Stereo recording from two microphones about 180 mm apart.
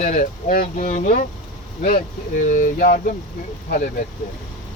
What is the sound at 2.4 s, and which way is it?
Speech, 45° left (ahead or behind).